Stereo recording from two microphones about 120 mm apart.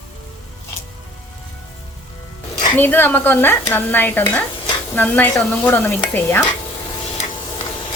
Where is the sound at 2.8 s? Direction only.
15° left (ahead or behind).